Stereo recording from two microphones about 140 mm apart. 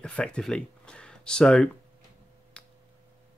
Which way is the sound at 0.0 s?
5° left (ahead or behind).